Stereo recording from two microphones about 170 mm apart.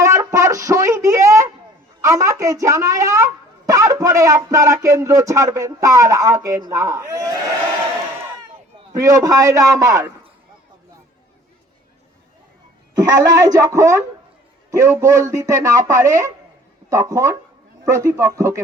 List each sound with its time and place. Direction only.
0.0 s a sound: 20° right (ahead or behind)
2.0 s speech: 20° right (ahead or behind)
8.9 s speech: 20° right (ahead or behind)
13.1 s a man's voice: 20° right (ahead or behind)